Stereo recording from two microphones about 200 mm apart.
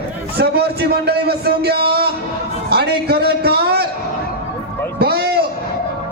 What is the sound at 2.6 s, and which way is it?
A man's voice, 55° right (ahead or behind).